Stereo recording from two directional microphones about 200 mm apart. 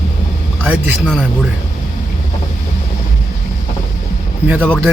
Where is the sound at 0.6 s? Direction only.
5° right (ahead or behind).